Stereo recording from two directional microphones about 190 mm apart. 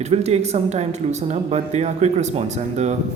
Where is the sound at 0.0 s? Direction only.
35° right (ahead or behind).